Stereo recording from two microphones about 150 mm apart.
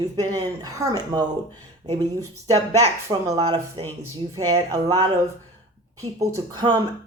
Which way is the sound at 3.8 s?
35° right (ahead or behind).